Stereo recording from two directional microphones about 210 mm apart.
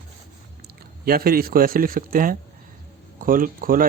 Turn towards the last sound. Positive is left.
turn(degrees=-40)  # may be behind; listen again after turning